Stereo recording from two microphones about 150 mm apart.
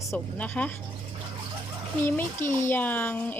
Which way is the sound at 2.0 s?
15° left (ahead or behind).